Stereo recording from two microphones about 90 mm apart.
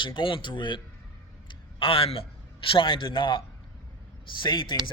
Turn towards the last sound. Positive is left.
turn(degrees=60)  # may be behind; listen again after turning